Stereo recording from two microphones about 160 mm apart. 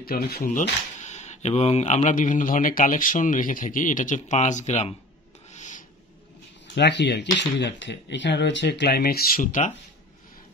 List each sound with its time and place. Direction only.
0.0 s speech: 75° left (ahead or behind); by 4.9 s 45° left (ahead or behind)
5.5 s filing: 50° left (ahead or behind)
6.7 s speech: 90° left; by 9.7 s 55° left (ahead or behind)